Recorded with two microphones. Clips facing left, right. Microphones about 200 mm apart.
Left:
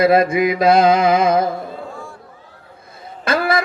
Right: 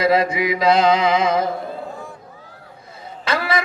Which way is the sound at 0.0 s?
50° left (ahead or behind).